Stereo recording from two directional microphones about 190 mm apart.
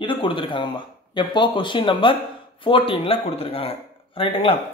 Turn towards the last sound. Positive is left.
turn(degrees=25)  # may be behind; listen again after turning